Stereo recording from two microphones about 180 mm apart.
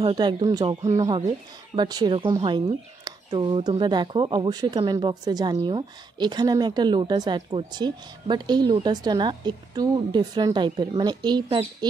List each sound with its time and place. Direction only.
0.0 s speech: 25° right (ahead or behind)